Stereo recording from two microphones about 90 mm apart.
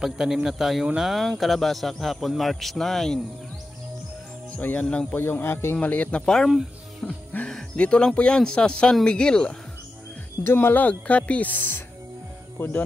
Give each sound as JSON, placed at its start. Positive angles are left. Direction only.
{"t": 0.0, "sound": "speech", "side_deg": -5}
{"t": 4.6, "sound": "speech", "side_deg": 20}
{"t": 6.2, "sound": "speech", "side_deg": 5}
{"t": 10.4, "sound": "speech", "side_deg": 25}